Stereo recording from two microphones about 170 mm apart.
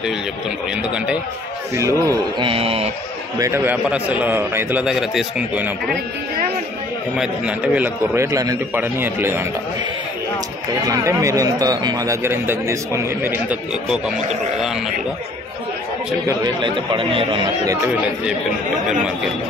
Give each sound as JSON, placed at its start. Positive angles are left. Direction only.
{"t": 1.8, "sound": "a man's voice", "side_deg": -20}
{"t": 3.3, "sound": "a man's voice", "side_deg": -15}
{"t": 7.2, "sound": "a man's voice", "side_deg": -5}
{"t": 10.9, "sound": "a man's voice", "side_deg": -20}
{"t": 13.9, "sound": "speech", "side_deg": 0}
{"t": 16.3, "sound": "a man's voice", "side_deg": -25}